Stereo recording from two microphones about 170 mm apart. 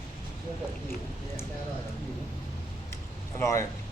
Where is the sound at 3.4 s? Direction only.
15° left (ahead or behind).